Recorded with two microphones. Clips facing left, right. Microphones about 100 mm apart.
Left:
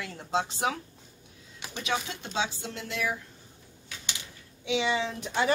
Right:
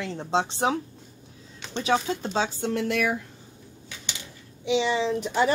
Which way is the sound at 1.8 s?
40° right (ahead or behind).